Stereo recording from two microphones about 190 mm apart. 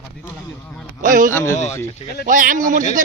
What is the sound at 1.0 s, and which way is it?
Speech, 45° right (ahead or behind).